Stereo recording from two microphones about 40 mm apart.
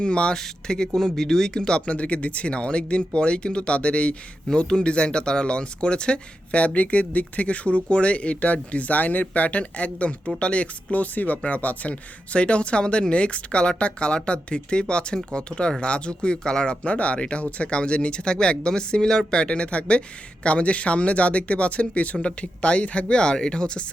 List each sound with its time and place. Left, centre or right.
0.0 s speech: left
0.3 s speech: centre
16.8 s speech: left